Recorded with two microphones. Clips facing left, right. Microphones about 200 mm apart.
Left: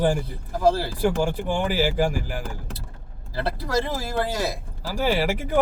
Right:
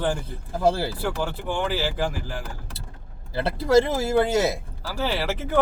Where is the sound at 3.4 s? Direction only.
20° right (ahead or behind).